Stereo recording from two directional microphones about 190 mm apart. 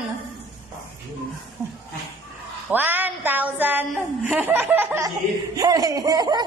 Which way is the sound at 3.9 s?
5° right (ahead or behind).